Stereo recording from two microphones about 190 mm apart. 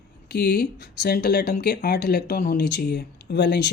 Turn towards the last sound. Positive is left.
turn(degrees=60)  # may be behind; listen again after turning